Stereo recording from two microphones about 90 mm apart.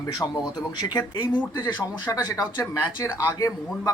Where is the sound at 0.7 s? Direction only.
50° left (ahead or behind).